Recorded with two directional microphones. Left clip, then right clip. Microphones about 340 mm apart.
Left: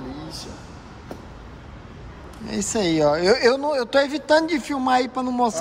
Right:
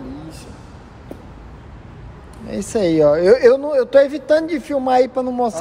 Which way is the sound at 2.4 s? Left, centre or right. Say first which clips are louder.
Right 5 dB; centre.